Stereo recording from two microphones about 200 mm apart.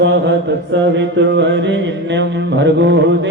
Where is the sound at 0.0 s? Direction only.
60° right (ahead or behind).